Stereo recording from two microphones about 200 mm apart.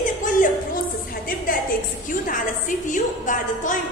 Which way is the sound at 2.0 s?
40° left (ahead or behind).